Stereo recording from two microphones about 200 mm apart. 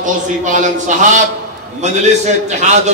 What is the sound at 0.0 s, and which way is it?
A man's voice, 40° right (ahead or behind).